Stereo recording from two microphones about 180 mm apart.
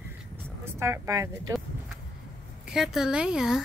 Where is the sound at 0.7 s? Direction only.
15° right (ahead or behind).